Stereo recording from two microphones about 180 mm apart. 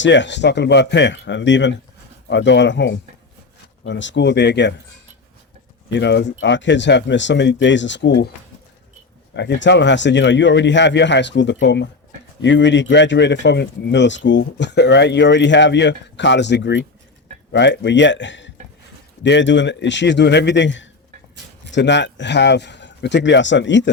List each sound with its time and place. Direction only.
0.0 s speech: 85° left
2.2 s a man's voice: 75° left (ahead or behind)
5.9 s speech: 75° left (ahead or behind)
9.3 s a man's voice: 75° left (ahead or behind); by 20.9 s 90° left
21.7 s a man's voice: 75° left (ahead or behind)